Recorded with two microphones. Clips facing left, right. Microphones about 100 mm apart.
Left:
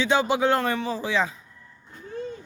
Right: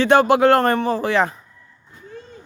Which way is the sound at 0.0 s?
70° right (ahead or behind).